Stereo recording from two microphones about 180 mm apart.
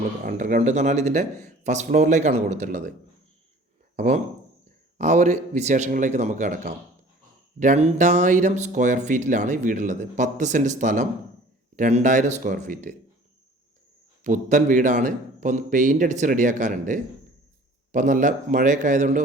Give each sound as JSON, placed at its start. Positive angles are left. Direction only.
{"t": 0.3, "sound": "a man's voice", "side_deg": -45}
{"t": 3.9, "sound": "a man's voice", "side_deg": -40}
{"t": 14.3, "sound": "speech", "side_deg": -45}